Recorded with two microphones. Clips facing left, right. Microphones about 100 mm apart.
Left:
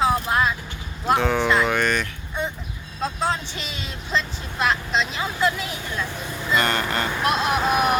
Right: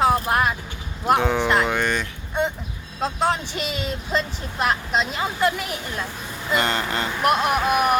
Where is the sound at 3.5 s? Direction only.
55° right (ahead or behind).